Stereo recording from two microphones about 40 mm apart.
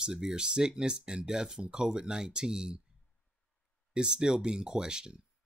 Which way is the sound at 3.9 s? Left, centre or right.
Right.